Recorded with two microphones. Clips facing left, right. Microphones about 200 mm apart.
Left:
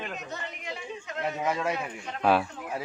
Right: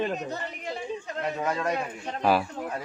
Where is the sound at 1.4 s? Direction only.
5° left (ahead or behind).